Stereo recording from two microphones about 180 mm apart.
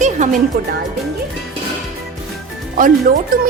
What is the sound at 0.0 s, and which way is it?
Music, 40° right (ahead or behind).